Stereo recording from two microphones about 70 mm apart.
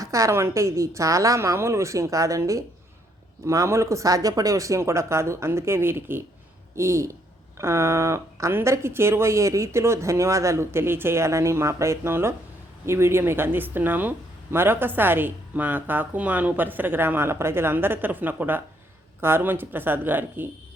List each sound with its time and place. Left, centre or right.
0.0 s speech: right